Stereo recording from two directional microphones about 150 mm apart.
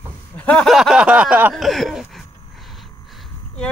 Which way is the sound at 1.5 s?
Centre (ahead or behind).